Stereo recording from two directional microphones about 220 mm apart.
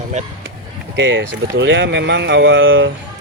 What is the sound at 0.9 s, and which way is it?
Speech, 60° right (ahead or behind).